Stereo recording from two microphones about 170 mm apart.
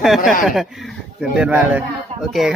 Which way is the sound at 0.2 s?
55° left (ahead or behind).